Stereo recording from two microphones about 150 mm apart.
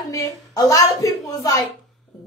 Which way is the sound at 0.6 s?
20° left (ahead or behind).